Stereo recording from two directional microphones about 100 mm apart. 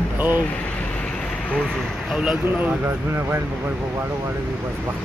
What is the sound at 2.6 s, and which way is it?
Speech, 20° right (ahead or behind).